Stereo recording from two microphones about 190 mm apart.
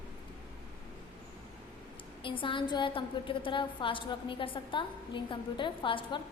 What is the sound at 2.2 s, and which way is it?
A woman's voice, 25° left (ahead or behind).